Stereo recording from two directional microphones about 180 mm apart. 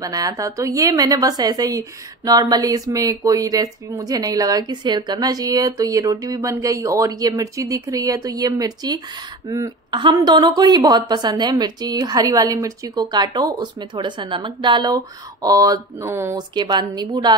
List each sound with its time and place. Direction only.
0.0 s a woman's voice: 20° right (ahead or behind)